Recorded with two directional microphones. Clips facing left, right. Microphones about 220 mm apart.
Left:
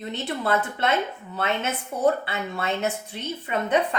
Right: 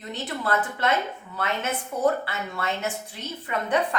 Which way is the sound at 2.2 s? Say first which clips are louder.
Left 2 dB; 20° left (ahead or behind).